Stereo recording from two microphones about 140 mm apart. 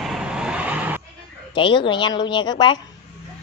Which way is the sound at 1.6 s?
35° left (ahead or behind).